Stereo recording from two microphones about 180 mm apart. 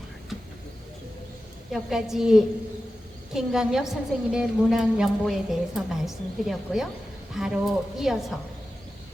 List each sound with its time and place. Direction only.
1.7 s a woman's voice: centre (ahead or behind)